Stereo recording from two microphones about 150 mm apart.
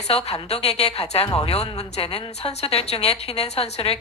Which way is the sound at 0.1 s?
45° left (ahead or behind).